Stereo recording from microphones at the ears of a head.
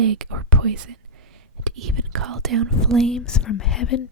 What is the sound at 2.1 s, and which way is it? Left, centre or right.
Speech, right.